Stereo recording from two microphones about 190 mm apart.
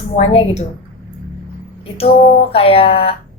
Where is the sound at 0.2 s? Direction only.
35° left (ahead or behind).